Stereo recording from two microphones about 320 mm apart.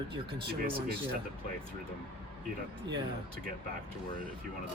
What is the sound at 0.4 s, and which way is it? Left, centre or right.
Speech, right.